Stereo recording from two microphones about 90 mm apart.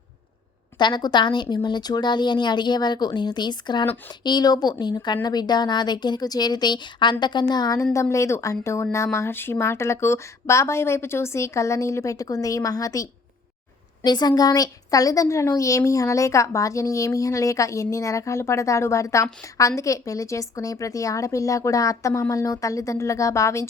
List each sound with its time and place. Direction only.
0.8 s a woman's voice: 55° left (ahead or behind)
8.1 s a woman's voice: 35° left (ahead or behind)